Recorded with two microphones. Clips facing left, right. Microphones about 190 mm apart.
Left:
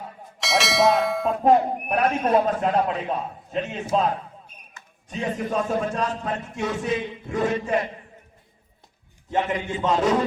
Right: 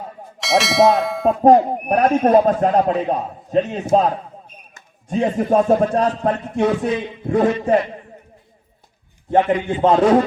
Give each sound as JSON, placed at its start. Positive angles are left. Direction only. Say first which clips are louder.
{"t": 0.3, "sound": "speech", "louder": "right 6 dB", "side_deg": 0}
{"t": 1.4, "sound": "a man's voice", "louder": "right 6 dB", "side_deg": -40}
{"t": 9.3, "sound": "speech", "louder": "right 8 dB", "side_deg": -55}